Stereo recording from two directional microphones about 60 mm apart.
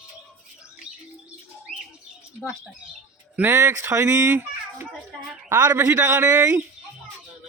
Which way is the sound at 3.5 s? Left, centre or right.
Right.